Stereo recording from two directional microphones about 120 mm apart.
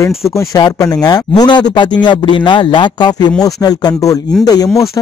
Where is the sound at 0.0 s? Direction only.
25° left (ahead or behind).